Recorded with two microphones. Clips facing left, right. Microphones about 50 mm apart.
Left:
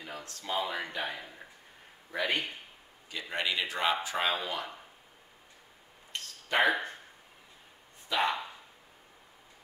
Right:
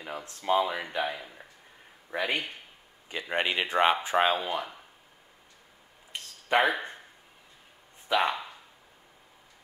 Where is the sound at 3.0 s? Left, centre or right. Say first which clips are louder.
Right 4 dB; right.